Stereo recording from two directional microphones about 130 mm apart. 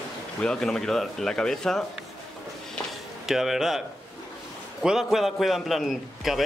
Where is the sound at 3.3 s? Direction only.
5° right (ahead or behind).